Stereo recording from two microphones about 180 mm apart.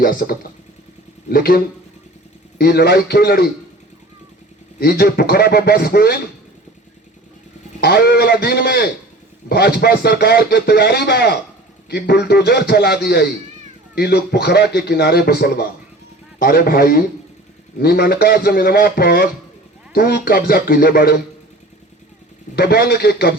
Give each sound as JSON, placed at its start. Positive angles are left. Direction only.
{"t": 0.0, "sound": "speech", "side_deg": 55}
{"t": 4.8, "sound": "speech", "side_deg": 60}
{"t": 7.8, "sound": "speech", "side_deg": 60}
{"t": 22.5, "sound": "speech", "side_deg": 60}